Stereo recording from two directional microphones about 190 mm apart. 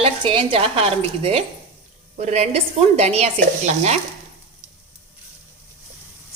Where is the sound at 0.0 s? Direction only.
30° right (ahead or behind).